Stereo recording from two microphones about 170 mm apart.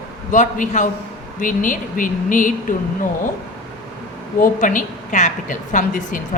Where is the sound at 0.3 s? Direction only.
50° left (ahead or behind).